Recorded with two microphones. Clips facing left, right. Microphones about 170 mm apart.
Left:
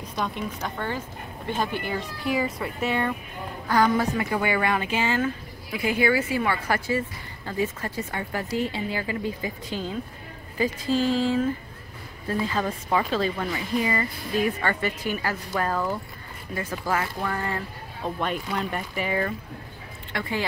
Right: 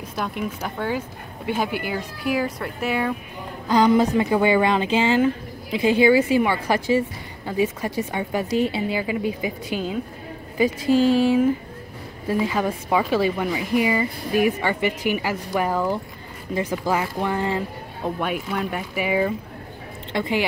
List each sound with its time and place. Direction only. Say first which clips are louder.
0.1 s speech: right 2 dB; 5° right (ahead or behind)
3.6 s a woman's voice: right 5 dB; 20° right (ahead or behind)
18.2 s speech: right 1 dB; 5° right (ahead or behind)
20.1 s speech: right 6 dB; 20° right (ahead or behind)